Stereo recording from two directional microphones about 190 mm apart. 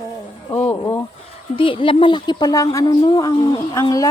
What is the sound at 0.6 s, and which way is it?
Speech, 15° left (ahead or behind).